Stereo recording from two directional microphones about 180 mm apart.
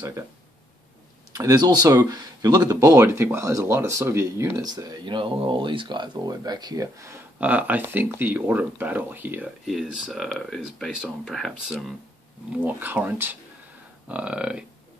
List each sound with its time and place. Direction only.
1.3 s speech: 20° right (ahead or behind)